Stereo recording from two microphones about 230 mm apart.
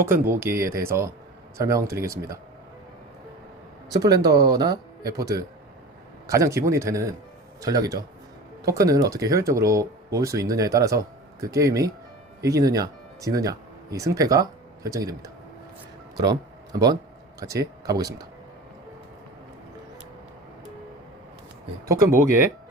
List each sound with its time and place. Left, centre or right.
0.0 s speech: centre
3.8 s speech: centre
21.8 s speech: centre